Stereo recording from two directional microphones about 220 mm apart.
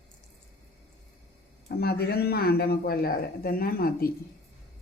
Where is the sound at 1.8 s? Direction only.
45° left (ahead or behind).